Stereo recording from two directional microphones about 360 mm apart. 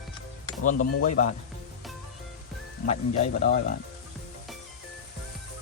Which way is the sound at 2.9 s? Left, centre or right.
Centre.